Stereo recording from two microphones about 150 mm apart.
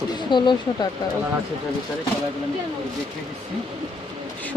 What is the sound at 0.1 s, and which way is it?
Speech, 30° left (ahead or behind).